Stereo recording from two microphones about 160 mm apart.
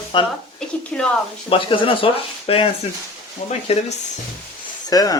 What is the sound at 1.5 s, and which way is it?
Speech, 30° left (ahead or behind).